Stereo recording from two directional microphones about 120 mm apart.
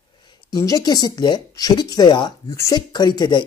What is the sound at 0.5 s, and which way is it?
Speech, 30° left (ahead or behind).